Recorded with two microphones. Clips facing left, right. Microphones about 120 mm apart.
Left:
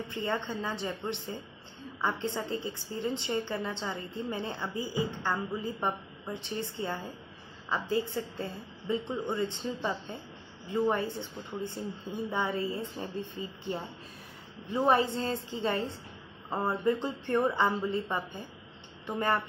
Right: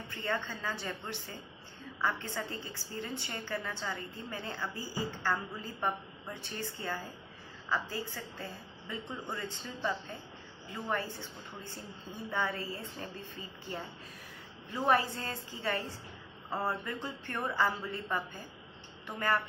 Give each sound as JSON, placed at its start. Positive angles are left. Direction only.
{"t": 0.0, "sound": "a woman's voice", "side_deg": 20}